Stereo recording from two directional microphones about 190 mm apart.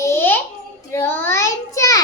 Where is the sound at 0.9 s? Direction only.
10° left (ahead or behind).